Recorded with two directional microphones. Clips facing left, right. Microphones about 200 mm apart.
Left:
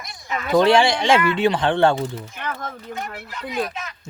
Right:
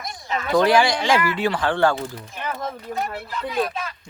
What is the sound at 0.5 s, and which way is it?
Speech, 25° left (ahead or behind).